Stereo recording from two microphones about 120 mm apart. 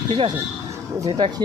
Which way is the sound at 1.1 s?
50° right (ahead or behind).